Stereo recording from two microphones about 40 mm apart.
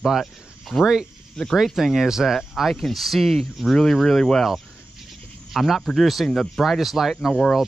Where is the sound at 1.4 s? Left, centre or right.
Centre.